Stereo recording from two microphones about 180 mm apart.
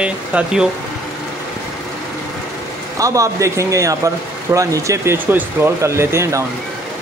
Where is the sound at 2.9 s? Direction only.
20° right (ahead or behind).